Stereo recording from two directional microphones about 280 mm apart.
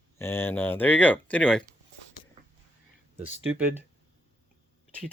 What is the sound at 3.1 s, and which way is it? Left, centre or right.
Speech, left.